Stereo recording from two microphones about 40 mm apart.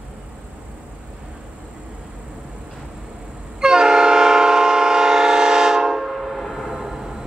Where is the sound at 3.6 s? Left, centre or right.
Centre.